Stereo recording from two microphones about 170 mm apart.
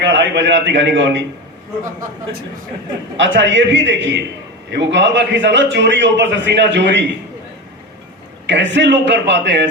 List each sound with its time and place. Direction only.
0.0 s a man's voice: 90° right
3.2 s a man's voice: 90° right
8.4 s a man's voice: 90° right